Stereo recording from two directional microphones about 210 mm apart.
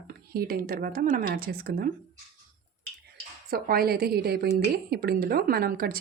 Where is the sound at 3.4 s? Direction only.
45° right (ahead or behind).